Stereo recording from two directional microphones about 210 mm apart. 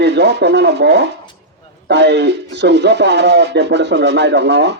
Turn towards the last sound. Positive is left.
turn(degrees=-55)  # may be behind; listen again after turning